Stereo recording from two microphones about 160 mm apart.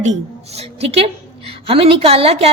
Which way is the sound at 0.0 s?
45° right (ahead or behind).